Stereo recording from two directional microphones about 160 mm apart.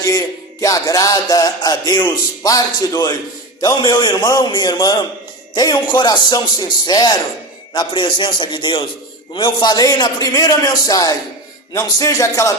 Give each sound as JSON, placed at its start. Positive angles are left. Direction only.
{"t": 0.0, "sound": "music", "side_deg": 20}